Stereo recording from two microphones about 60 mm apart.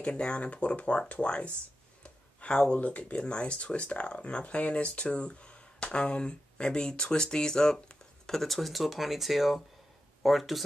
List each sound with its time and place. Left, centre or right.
0.0 s speech: centre